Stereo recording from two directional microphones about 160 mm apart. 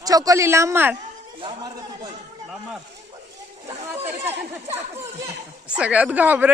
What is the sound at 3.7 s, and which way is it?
A woman's voice, 15° right (ahead or behind).